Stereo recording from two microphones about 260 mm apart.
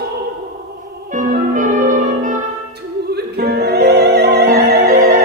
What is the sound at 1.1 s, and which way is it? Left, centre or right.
Music, right.